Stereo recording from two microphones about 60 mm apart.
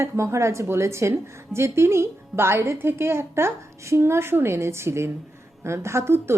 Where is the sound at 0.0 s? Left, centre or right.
Right.